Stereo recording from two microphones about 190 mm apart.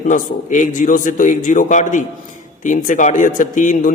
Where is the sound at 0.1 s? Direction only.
40° left (ahead or behind).